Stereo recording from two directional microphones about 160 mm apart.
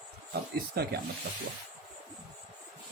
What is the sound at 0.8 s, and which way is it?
Speech, 80° right.